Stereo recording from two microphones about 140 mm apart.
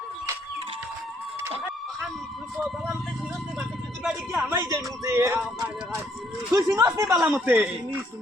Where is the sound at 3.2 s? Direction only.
5° right (ahead or behind).